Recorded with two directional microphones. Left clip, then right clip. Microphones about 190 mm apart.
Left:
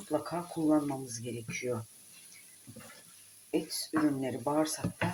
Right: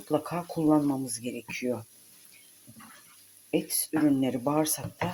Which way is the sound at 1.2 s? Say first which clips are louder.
Right 3 dB; 50° right (ahead or behind).